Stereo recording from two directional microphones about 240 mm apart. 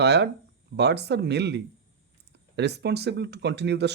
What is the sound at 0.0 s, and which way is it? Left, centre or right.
Speech, right.